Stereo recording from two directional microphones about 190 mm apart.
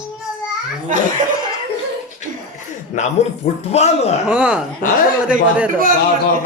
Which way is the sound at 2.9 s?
40° left (ahead or behind).